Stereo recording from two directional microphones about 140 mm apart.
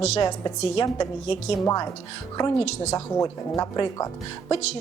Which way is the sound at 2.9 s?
25° left (ahead or behind).